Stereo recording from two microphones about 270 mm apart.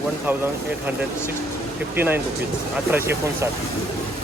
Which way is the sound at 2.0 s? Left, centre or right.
Centre.